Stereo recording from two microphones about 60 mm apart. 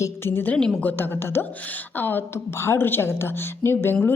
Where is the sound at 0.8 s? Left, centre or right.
Left.